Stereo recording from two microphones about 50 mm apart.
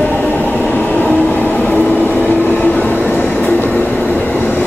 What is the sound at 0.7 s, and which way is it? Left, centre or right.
Vehicle, left.